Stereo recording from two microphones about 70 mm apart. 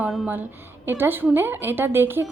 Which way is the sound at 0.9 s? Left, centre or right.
Right.